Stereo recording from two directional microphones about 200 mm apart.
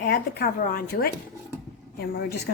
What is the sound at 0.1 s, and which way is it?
Speech, 50° left (ahead or behind).